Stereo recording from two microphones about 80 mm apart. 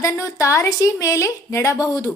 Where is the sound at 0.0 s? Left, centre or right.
Left.